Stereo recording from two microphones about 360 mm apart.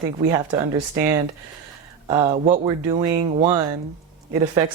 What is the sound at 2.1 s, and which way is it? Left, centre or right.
Speech, centre.